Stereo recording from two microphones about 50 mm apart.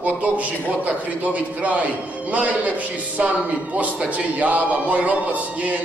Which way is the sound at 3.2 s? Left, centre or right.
Right.